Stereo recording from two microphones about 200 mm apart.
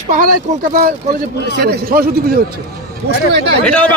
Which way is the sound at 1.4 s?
55° right (ahead or behind).